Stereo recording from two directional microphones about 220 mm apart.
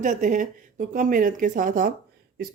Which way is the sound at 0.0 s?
35° right (ahead or behind).